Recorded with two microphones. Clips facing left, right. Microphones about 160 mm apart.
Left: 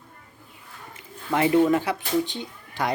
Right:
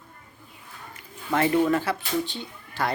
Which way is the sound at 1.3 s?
15° left (ahead or behind).